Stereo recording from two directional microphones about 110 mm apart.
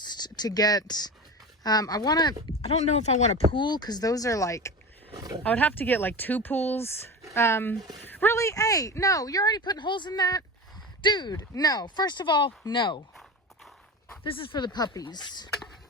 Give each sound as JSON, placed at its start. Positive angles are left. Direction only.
{"t": 0.0, "sound": "speech", "side_deg": 40}
{"t": 2.6, "sound": "speech", "side_deg": 70}
{"t": 3.5, "sound": "speech", "side_deg": 45}
{"t": 5.1, "sound": "roaring cats", "side_deg": -35}
{"t": 5.4, "sound": "speech", "side_deg": 15}
{"t": 14.3, "sound": "speech", "side_deg": 50}